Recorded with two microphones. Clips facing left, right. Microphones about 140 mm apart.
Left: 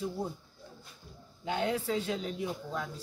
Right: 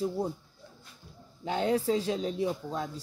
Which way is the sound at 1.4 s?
35° right (ahead or behind).